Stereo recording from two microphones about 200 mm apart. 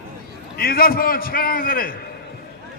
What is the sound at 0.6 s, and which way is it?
A man's voice, 50° left (ahead or behind).